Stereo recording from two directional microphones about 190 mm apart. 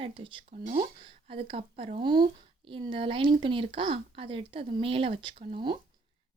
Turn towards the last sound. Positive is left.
turn(degrees=-25)  # may be behind; listen again after turning